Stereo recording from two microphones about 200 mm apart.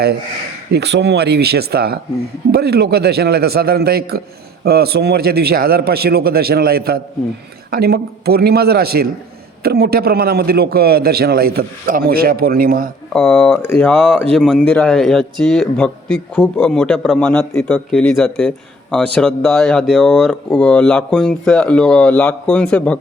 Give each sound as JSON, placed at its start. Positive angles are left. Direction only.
{"t": 0.7, "sound": "a man's voice", "side_deg": -55}
{"t": 13.1, "sound": "a man's voice", "side_deg": 0}